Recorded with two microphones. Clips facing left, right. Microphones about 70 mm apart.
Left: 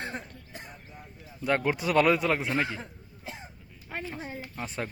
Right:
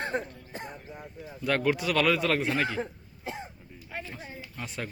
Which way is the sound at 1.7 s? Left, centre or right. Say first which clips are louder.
Left 3 dB; left.